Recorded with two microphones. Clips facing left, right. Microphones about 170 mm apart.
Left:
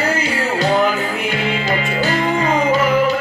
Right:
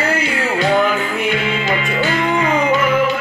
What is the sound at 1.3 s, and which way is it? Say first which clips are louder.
Music: right 1 dB; 40° left (ahead or behind).